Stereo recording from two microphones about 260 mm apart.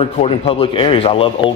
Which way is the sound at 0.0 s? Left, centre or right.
Left.